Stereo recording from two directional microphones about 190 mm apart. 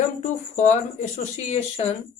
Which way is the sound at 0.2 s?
40° left (ahead or behind).